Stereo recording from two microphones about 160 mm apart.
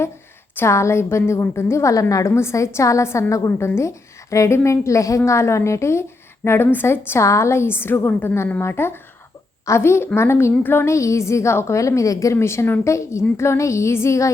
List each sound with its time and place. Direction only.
0.5 s a woman's voice: 15° left (ahead or behind)